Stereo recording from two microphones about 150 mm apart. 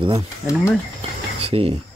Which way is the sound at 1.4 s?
40° right (ahead or behind).